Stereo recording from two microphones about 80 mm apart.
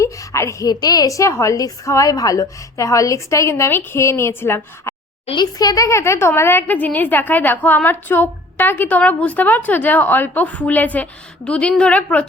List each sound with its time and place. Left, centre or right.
0.0 s a sound: left
0.7 s a woman's voice: left
5.5 s a woman's voice: left; by 12.2 s centre